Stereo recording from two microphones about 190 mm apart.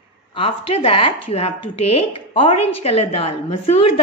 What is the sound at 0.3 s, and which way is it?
A woman's voice, 30° left (ahead or behind).